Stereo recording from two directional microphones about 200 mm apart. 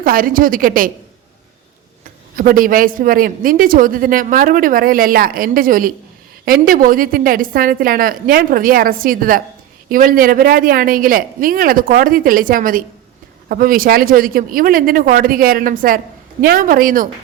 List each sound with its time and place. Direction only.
0.0 s speech: 45° right (ahead or behind)
2.3 s speech: 45° right (ahead or behind)